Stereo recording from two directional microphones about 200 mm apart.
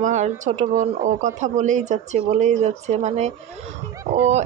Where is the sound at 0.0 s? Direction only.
35° right (ahead or behind).